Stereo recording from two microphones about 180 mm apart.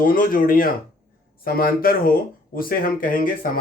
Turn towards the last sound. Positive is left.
turn(degrees=50)  # may be behind; listen again after turning